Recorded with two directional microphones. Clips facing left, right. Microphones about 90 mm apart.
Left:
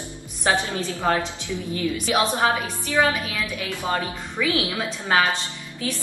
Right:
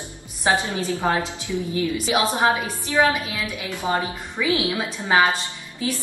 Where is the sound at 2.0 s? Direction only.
20° right (ahead or behind).